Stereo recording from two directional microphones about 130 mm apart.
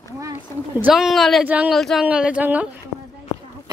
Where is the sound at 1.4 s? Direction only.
10° right (ahead or behind).